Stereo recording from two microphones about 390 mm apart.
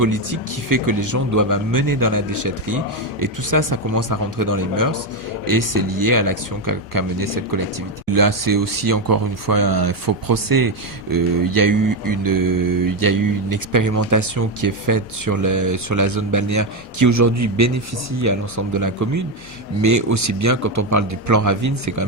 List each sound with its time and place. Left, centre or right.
0.0 s mantra: right
5.5 s speech: right
11.1 s mantra: right